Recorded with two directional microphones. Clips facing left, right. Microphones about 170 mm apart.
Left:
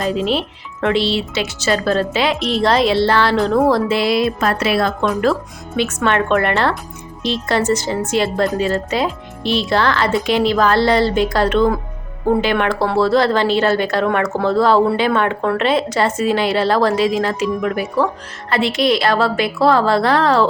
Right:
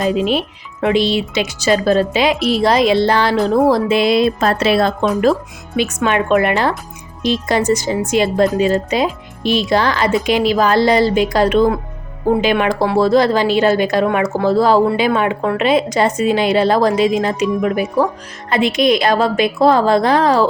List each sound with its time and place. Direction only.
0.0 s a woman's voice: 15° right (ahead or behind)
5.2 s speech: 15° right (ahead or behind)